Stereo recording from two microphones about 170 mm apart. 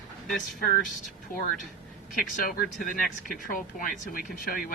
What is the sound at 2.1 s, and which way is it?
Speech, 55° left (ahead or behind).